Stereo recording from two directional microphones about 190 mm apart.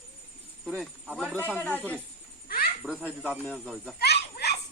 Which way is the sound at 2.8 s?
5° right (ahead or behind).